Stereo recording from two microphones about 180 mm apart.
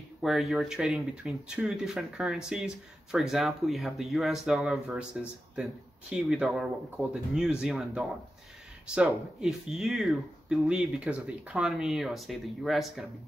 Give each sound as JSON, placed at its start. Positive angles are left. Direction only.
{"t": 0.2, "sound": "speech", "side_deg": 0}